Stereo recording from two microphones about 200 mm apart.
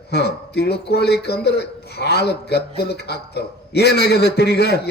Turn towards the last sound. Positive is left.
turn(degrees=55)  # may be behind; listen again after turning